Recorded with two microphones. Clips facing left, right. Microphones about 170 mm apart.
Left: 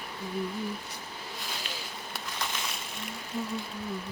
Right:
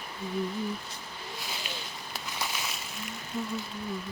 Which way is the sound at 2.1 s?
5° right (ahead or behind).